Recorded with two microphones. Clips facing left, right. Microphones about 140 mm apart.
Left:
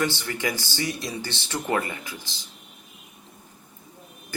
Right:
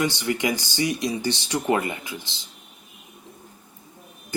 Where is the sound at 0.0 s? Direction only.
15° right (ahead or behind).